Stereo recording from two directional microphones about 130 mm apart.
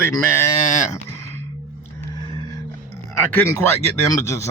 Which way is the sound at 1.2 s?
20° left (ahead or behind).